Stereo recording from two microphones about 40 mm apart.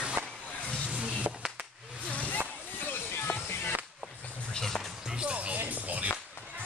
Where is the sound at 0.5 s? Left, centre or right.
Left.